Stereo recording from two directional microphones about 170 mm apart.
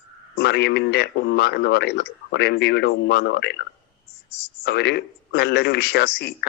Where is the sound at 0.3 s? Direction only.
75° left (ahead or behind).